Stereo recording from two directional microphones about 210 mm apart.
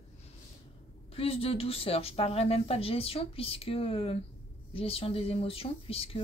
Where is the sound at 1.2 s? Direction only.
30° left (ahead or behind).